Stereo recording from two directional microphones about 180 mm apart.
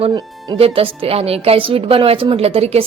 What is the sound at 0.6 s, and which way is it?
A woman's voice, 30° right (ahead or behind).